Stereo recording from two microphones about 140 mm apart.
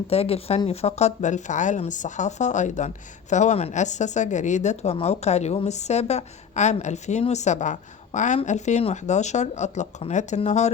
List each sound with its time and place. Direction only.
0.1 s speech: 45° left (ahead or behind)